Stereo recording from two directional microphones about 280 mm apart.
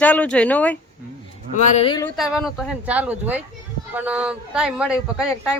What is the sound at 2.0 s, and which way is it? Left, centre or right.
Speech, centre.